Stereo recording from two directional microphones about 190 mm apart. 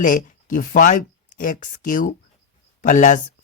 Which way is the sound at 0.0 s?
45° left (ahead or behind).